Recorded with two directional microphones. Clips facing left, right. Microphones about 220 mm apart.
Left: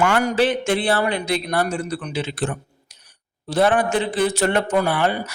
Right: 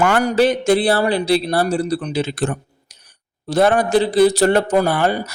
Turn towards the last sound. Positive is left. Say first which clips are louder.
# right 3 dB
turn(degrees=-40)  # may be behind; listen again after turning